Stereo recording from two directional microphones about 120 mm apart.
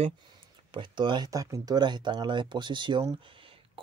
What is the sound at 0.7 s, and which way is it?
Speech, 40° right (ahead or behind).